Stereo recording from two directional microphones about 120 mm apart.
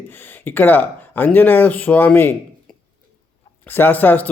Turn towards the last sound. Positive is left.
turn(degrees=15)  # may be behind; listen again after turning